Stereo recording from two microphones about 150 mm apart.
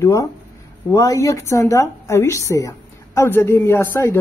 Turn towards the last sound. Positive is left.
turn(degrees=15)  # may be behind; listen again after turning